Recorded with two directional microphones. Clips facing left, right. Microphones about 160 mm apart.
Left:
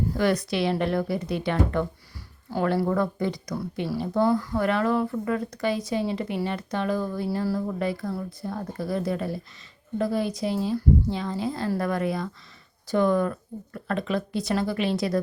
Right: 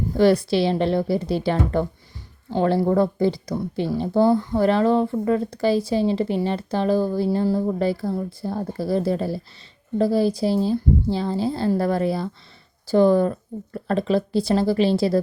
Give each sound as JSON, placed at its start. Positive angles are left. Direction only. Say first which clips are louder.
{"t": 0.2, "sound": "speech", "louder": "right 8 dB", "side_deg": -30}